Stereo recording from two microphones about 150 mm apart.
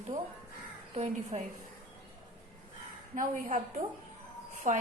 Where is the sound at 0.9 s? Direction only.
50° right (ahead or behind).